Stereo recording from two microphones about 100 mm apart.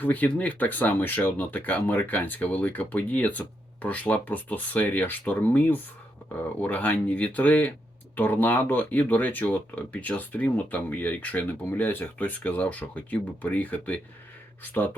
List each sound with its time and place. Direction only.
0.0 s speech: 15° left (ahead or behind)